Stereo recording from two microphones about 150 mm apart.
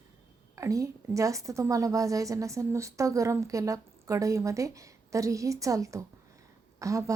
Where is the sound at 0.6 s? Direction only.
20° right (ahead or behind).